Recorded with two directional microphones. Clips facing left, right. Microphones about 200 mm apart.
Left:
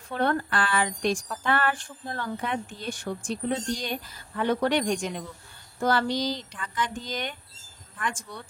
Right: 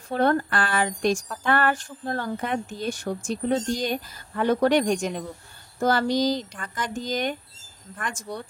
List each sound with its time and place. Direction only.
0.1 s a woman's voice: 40° right (ahead or behind)